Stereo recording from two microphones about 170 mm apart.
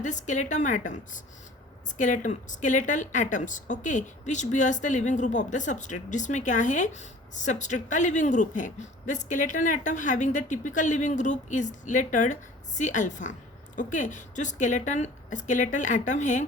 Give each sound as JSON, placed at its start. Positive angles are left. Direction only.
{"t": 0.0, "sound": "speech", "side_deg": 45}